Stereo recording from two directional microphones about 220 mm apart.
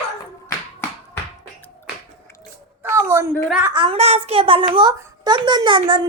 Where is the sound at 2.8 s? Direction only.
10° right (ahead or behind).